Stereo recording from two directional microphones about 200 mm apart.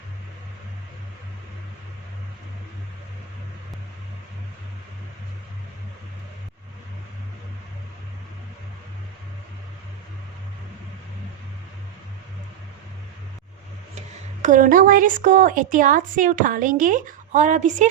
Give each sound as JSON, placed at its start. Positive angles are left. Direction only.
{"t": 14.4, "sound": "a woman's voice", "side_deg": -40}